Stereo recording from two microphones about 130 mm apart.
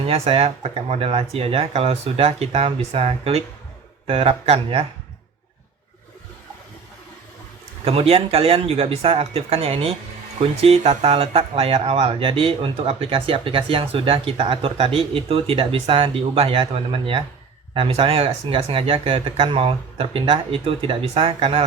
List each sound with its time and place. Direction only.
0.0 s speech: 50° right (ahead or behind)
7.9 s speech: 50° right (ahead or behind)